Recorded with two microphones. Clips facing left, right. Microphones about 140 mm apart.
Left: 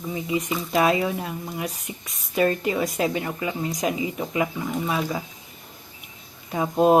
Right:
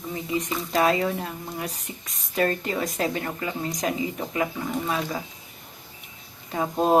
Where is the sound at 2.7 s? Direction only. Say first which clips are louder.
Left 2 dB; 10° left (ahead or behind).